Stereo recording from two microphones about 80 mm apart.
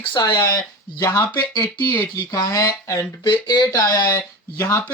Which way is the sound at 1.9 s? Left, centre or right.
Left.